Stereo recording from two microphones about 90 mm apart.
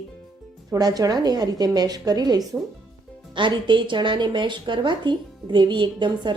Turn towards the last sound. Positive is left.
turn(degrees=-60)  # may be behind; listen again after turning